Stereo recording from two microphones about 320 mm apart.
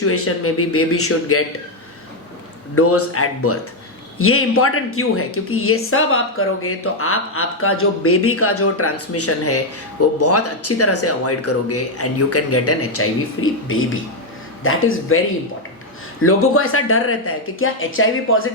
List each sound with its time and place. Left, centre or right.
0.0 s speech: left
2.7 s speech: left
16.2 s speech: left